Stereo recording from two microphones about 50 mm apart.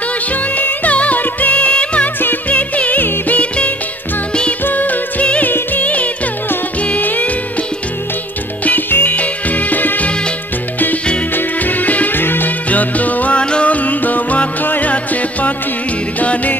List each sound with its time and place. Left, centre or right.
0.3 s music: left
8.6 s music: left
11.3 s music: left
12.2 s music: left
12.6 s music: left
16.2 s music: left